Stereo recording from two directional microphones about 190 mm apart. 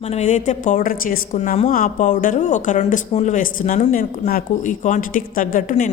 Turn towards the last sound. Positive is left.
turn(degrees=40)  # may be behind; listen again after turning